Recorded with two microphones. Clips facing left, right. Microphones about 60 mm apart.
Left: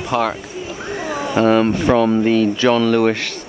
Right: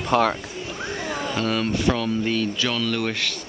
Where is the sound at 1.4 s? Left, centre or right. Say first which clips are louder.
Left 11 dB; centre.